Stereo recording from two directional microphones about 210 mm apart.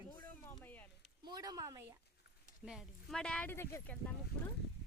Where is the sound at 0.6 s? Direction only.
10° left (ahead or behind).